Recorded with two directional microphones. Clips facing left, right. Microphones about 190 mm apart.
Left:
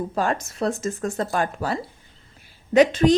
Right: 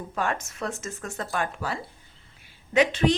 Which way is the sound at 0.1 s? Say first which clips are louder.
Left 5 dB; 35° left (ahead or behind).